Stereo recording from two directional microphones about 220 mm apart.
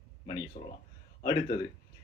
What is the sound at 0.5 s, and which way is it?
Speech, 30° left (ahead or behind).